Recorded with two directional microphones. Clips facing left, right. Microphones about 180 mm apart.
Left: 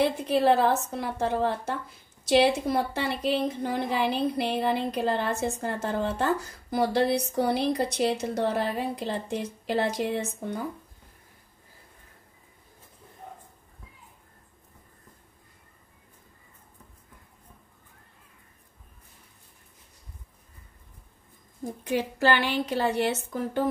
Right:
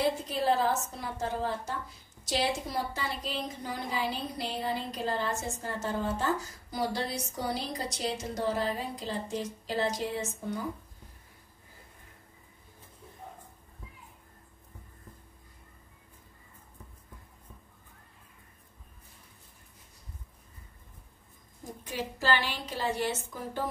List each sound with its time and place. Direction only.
0.3 s speech: 65° left (ahead or behind)
21.9 s speech: 65° left (ahead or behind)